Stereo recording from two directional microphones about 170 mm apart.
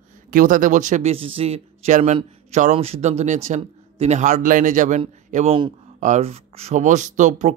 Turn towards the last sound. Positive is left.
turn(degrees=-45)  # may be behind; listen again after turning